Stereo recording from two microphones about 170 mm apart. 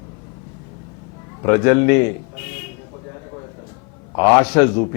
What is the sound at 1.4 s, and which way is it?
Speech, 20° left (ahead or behind).